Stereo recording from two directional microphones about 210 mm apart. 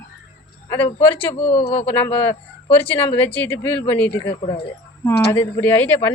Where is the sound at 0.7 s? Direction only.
25° left (ahead or behind).